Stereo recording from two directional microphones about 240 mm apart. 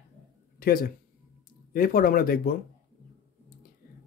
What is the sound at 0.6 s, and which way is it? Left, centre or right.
Speech, left.